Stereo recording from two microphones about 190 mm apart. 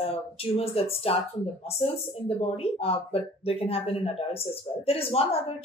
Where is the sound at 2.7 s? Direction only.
30° left (ahead or behind).